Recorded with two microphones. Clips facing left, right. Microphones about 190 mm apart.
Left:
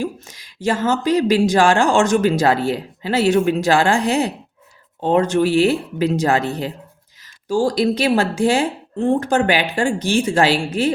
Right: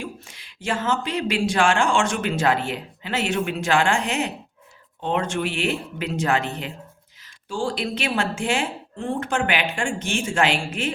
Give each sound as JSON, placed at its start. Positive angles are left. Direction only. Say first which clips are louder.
{"t": 0.0, "sound": "speech", "louder": "left 9 dB", "side_deg": 40}